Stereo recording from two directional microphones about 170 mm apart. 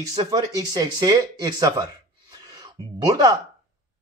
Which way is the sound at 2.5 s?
20° right (ahead or behind).